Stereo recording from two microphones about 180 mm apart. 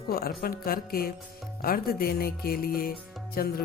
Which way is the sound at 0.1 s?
55° left (ahead or behind).